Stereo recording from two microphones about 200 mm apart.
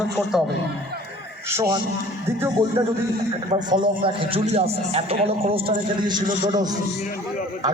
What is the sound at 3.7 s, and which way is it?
A man's voice, 25° right (ahead or behind).